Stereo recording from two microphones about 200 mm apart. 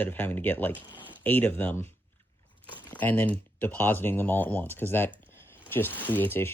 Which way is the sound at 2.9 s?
10° left (ahead or behind).